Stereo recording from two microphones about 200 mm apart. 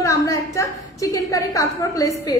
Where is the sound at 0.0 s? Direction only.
15° left (ahead or behind).